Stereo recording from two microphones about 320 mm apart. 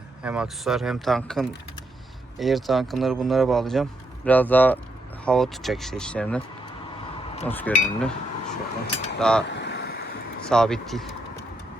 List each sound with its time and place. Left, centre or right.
0.2 s a man's voice: centre
7.4 s a man's voice: centre
9.5 s vehicle: left
10.5 s a man's voice: centre